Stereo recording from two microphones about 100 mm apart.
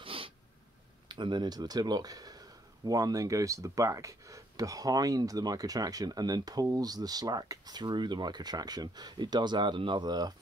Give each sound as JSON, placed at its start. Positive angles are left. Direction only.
{"t": 0.0, "sound": "sneeze", "side_deg": -65}
{"t": 1.2, "sound": "speech", "side_deg": -50}